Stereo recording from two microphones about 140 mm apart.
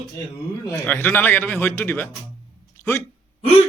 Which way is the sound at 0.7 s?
15° left (ahead or behind).